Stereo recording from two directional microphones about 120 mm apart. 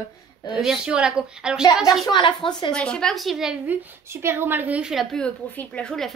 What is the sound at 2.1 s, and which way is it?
Speech, 40° left (ahead or behind).